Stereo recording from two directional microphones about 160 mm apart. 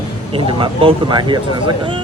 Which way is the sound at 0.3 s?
35° right (ahead or behind).